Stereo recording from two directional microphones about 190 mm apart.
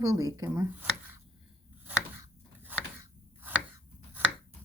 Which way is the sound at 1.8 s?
10° right (ahead or behind).